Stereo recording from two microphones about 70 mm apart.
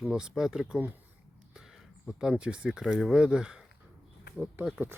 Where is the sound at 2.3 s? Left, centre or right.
Centre.